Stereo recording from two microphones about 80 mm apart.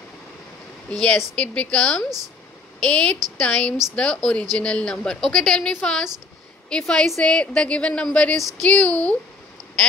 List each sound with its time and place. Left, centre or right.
0.9 s a woman's voice: centre